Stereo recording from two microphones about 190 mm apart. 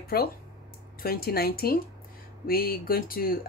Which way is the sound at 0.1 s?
55° left (ahead or behind).